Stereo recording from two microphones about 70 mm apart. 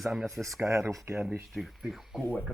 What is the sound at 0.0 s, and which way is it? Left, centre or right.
Speech, centre.